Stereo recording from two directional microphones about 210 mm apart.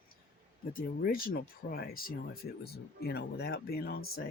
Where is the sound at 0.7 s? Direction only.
45° left (ahead or behind).